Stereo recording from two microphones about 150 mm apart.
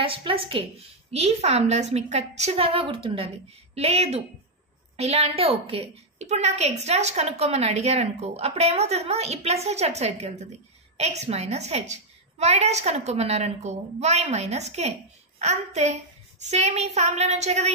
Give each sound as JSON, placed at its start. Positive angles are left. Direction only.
{"t": 0.0, "sound": "a woman's voice", "side_deg": -35}